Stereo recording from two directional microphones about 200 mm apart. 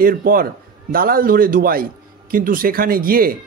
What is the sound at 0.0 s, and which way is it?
Speech, 45° right (ahead or behind).